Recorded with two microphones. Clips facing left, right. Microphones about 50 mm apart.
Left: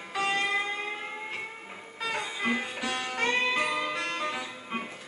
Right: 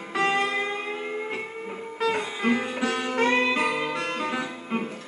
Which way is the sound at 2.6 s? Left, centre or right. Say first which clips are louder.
Right 6 dB; centre.